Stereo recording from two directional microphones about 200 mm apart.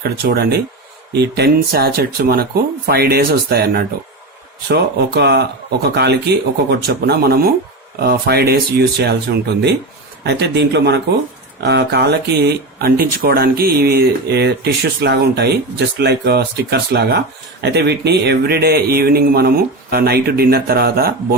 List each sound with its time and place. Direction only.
0.0 s speech: 50° right (ahead or behind)
10.2 s speech: 60° right (ahead or behind)